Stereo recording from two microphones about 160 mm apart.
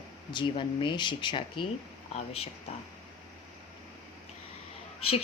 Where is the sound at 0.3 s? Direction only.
30° left (ahead or behind).